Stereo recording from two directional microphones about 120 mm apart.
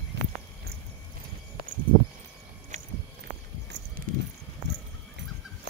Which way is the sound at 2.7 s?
75° right (ahead or behind).